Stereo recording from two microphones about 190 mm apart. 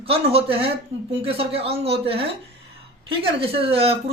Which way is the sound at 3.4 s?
30° right (ahead or behind).